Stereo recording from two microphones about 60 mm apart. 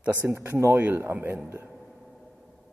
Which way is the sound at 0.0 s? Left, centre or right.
Right.